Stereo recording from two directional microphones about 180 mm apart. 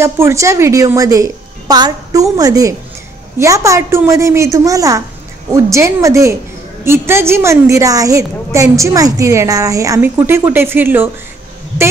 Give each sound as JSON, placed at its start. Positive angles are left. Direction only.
{"t": 0.0, "sound": "a woman's voice", "side_deg": -15}